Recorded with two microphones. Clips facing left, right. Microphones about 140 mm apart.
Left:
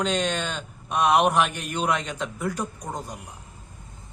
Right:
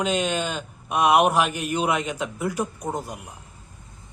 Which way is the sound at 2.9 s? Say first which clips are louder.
Right 5 dB; 20° right (ahead or behind).